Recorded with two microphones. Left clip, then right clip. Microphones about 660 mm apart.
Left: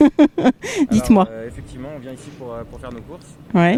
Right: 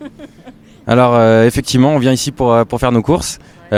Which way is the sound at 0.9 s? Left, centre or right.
Right.